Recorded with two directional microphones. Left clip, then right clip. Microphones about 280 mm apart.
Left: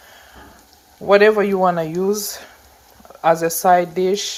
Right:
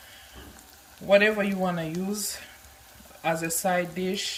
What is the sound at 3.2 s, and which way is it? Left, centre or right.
Speech, left.